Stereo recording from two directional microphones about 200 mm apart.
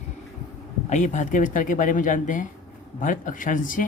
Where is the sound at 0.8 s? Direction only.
35° left (ahead or behind).